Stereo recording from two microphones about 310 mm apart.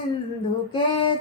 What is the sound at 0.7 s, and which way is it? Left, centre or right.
Female singing, centre.